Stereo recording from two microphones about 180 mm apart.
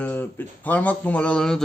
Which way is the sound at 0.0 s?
10° left (ahead or behind).